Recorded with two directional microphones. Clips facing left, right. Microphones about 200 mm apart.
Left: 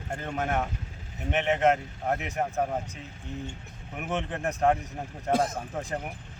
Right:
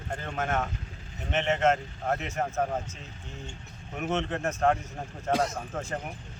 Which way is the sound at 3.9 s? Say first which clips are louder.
Right 2 dB; 10° left (ahead or behind).